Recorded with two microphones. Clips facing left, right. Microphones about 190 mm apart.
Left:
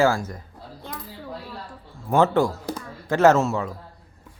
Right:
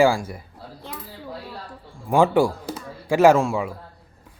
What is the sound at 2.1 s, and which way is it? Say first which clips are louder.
Speech: right 2 dB; 10° right (ahead or behind).